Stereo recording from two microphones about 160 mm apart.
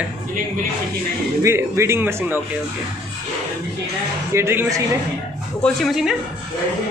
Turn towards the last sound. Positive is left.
turn(degrees=0)  # may be behind; listen again after turning